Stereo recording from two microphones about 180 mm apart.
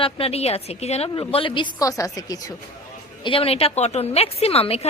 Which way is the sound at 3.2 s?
30° left (ahead or behind).